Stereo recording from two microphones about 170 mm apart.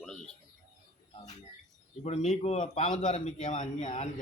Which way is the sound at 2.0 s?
40° left (ahead or behind).